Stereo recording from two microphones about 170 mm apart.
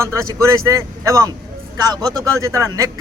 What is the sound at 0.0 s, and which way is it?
A man's voice, 20° right (ahead or behind).